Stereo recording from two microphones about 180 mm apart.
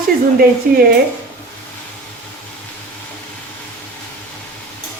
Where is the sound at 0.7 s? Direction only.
50° right (ahead or behind).